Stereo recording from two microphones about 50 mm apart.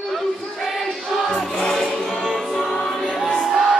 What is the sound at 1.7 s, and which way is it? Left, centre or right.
Music, centre.